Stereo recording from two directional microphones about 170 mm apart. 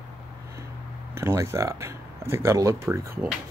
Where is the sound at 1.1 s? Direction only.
15° right (ahead or behind).